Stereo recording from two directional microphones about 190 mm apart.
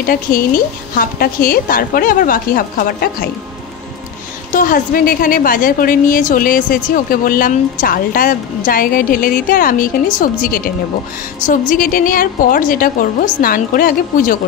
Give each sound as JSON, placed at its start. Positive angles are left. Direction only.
{"t": 0.0, "sound": "a woman's voice", "side_deg": 50}
{"t": 4.5, "sound": "a woman's voice", "side_deg": 45}
{"t": 11.7, "sound": "a woman's voice", "side_deg": 45}